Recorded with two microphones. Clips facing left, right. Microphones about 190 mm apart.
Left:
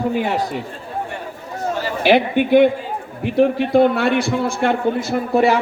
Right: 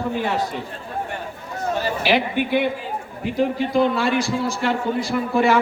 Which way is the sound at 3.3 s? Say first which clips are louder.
Left 5 dB; 60° left (ahead or behind).